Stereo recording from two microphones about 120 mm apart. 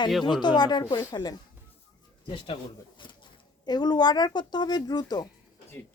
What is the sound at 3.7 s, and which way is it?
Speech, 35° left (ahead or behind).